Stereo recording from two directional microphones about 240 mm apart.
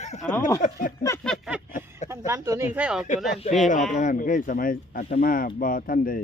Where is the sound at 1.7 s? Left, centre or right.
Left.